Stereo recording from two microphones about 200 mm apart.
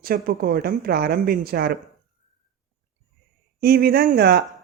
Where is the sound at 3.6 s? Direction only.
50° right (ahead or behind).